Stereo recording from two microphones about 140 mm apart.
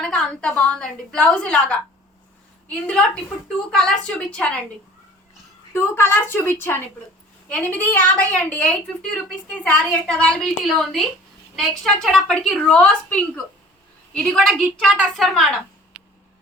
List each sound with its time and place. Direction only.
0.0 s a woman's voice: 5° left (ahead or behind)
5.7 s a woman's voice: 20° left (ahead or behind); by 15.5 s centre (ahead or behind)